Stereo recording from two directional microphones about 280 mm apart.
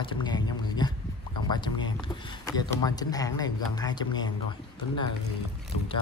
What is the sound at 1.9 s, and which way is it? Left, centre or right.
Speech, centre.